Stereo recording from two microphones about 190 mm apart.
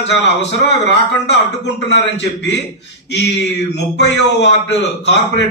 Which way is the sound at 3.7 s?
65° left (ahead or behind).